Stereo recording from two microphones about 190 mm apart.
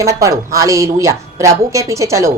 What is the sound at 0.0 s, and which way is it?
A woman's voice, 15° right (ahead or behind).